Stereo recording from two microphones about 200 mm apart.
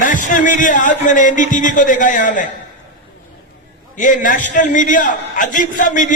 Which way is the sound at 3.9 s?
40° left (ahead or behind).